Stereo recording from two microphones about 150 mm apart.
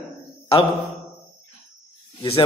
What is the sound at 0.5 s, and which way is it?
Speech, 40° left (ahead or behind).